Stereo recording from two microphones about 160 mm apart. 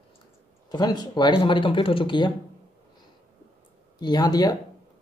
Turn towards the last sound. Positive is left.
turn(degrees=25)  # may be behind; listen again after turning